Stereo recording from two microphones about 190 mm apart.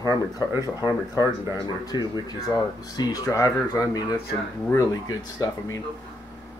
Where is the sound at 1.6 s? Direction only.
20° left (ahead or behind).